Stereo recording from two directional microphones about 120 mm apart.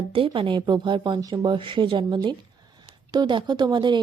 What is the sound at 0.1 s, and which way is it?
A woman's voice, 45° right (ahead or behind).